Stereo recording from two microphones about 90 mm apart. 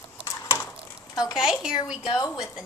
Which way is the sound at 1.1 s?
45° left (ahead or behind).